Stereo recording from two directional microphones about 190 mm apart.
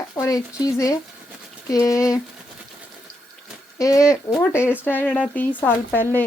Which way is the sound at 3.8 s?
15° left (ahead or behind).